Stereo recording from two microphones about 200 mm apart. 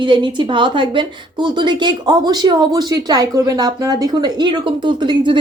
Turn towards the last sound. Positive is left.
turn(degrees=-25)  # may be behind; listen again after turning